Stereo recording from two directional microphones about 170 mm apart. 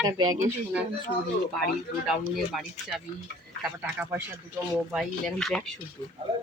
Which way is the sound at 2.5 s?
Centre (ahead or behind).